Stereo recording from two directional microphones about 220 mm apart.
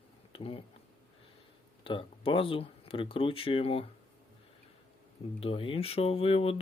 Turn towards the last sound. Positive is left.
turn(degrees=25)  # may be behind; listen again after turning